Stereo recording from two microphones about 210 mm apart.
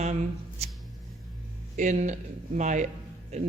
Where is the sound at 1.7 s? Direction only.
35° right (ahead or behind).